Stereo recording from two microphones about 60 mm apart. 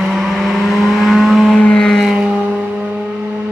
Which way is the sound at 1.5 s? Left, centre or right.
Centre.